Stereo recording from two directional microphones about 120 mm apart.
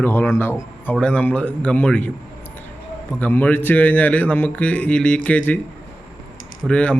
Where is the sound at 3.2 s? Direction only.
15° left (ahead or behind).